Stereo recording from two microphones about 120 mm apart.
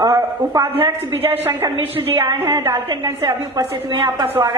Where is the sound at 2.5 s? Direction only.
20° right (ahead or behind).